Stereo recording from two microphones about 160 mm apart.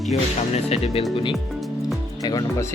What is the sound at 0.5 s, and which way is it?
Speech, 40° left (ahead or behind).